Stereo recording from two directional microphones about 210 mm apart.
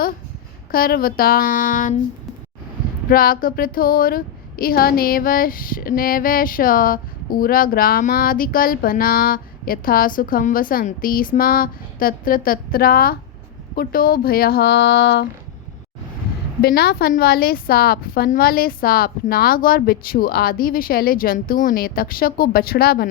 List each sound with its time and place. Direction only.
0.7 s speech: 45° left (ahead or behind)
3.1 s speech: 45° left (ahead or behind)
16.6 s speech: 50° left (ahead or behind)